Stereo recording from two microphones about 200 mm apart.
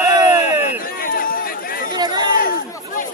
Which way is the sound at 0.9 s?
45° left (ahead or behind).